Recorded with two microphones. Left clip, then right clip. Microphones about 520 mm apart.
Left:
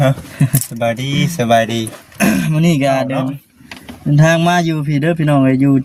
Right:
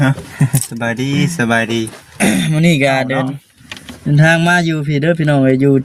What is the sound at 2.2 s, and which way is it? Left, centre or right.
Speech, left.